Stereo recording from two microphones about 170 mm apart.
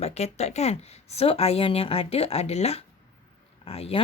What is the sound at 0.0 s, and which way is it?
Speech, 40° left (ahead or behind).